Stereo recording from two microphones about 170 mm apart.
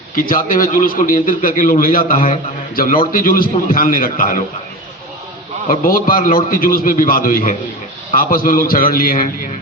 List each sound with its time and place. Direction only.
0.3 s a man's voice: 55° left (ahead or behind)
5.6 s a man's voice: 55° left (ahead or behind)